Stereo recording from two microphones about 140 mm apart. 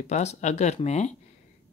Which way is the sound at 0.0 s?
55° left (ahead or behind).